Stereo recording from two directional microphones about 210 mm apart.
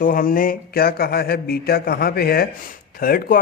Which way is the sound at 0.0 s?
40° left (ahead or behind).